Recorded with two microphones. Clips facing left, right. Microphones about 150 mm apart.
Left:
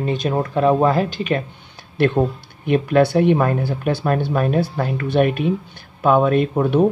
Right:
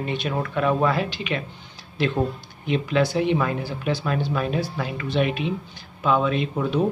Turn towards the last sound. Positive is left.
turn(degrees=50)  # may be behind; listen again after turning